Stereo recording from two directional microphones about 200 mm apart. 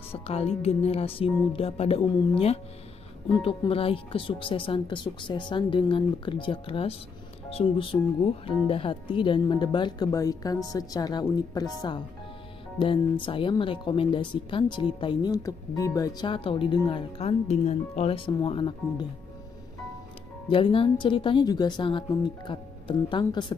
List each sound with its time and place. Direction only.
0.1 s speech: 30° left (ahead or behind)
20.4 s speech: 25° left (ahead or behind)